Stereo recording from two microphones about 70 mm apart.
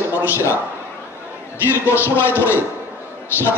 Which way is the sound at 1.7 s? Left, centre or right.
Left.